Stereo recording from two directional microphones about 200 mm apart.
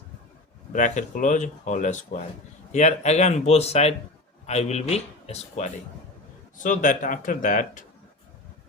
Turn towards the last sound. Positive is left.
turn(degrees=40)  # may be behind; listen again after turning